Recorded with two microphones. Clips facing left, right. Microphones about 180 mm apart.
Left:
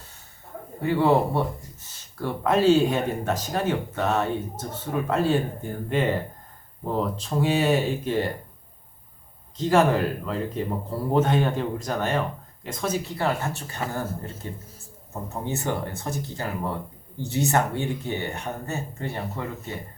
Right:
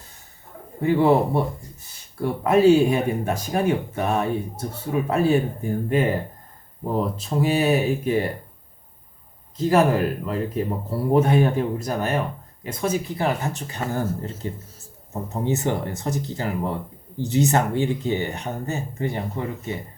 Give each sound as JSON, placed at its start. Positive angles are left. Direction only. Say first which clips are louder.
{"t": 2.2, "sound": "speech", "louder": "right 4 dB", "side_deg": -10}
{"t": 9.6, "sound": "speech", "louder": "right 2 dB", "side_deg": -5}
{"t": 15.3, "sound": "speech", "louder": "right 5 dB", "side_deg": -15}